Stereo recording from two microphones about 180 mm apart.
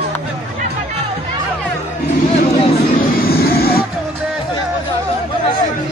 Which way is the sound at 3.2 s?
55° left (ahead or behind).